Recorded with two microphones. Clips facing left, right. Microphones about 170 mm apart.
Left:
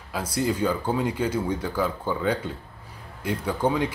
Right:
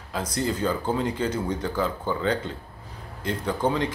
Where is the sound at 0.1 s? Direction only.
10° left (ahead or behind).